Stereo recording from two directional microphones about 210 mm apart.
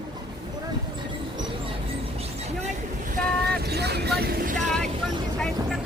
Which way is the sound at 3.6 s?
50° right (ahead or behind).